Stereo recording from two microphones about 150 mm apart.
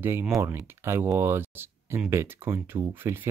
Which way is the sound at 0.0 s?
15° right (ahead or behind).